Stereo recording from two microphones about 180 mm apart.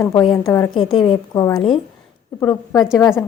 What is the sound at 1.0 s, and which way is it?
Speech, 20° left (ahead or behind).